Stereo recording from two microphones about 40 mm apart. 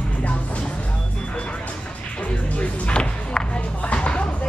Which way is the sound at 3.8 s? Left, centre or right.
Left.